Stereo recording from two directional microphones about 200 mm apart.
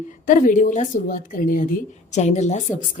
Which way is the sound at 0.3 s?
40° left (ahead or behind).